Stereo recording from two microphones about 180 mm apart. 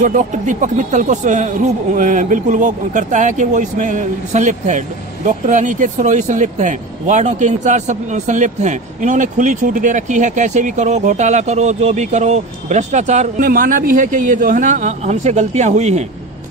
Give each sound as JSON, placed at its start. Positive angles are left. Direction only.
{"t": 0.0, "sound": "a man's voice", "side_deg": -45}